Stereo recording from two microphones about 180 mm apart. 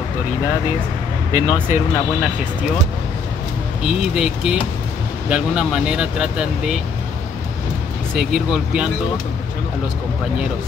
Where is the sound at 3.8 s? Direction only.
5° right (ahead or behind).